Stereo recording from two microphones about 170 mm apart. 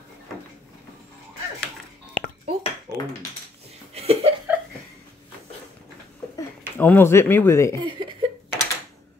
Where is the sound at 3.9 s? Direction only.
35° right (ahead or behind).